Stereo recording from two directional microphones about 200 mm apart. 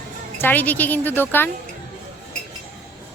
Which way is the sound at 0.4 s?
10° left (ahead or behind).